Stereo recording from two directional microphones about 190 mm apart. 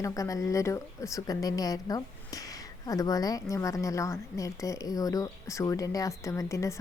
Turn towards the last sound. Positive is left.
turn(degrees=15)  # may be behind; listen again after turning